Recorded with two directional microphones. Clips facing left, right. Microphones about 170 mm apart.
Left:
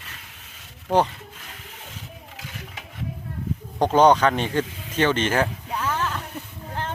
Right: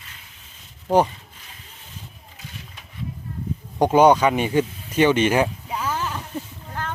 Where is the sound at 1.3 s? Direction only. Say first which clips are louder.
Left 5 dB; 90° left.